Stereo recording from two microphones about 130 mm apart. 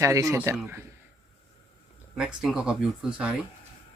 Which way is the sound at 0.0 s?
25° right (ahead or behind).